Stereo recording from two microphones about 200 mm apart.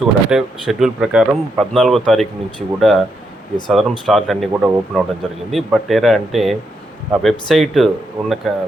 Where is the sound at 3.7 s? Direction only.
Centre (ahead or behind).